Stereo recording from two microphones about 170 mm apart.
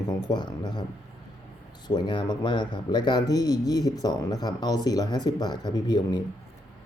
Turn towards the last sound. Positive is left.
turn(degrees=25)  # may be behind; listen again after turning